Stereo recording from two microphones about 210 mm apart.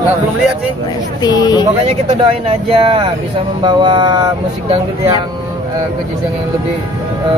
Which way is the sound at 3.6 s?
20° right (ahead or behind).